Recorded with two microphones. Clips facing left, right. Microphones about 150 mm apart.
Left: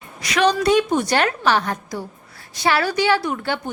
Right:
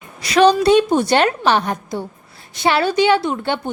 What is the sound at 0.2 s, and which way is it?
A woman's voice, 30° right (ahead or behind).